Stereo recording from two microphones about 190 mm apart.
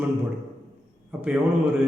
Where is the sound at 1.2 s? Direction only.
10° right (ahead or behind).